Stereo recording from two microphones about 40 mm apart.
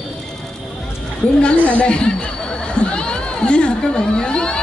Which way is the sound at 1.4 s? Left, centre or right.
Left.